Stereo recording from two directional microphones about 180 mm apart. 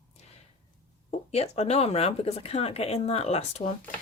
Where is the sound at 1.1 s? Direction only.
35° left (ahead or behind).